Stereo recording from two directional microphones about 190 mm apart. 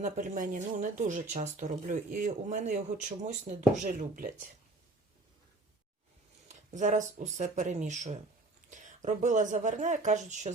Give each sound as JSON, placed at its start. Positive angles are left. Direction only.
{"t": 0.0, "sound": "speech", "side_deg": -40}
{"t": 6.5, "sound": "speech", "side_deg": -40}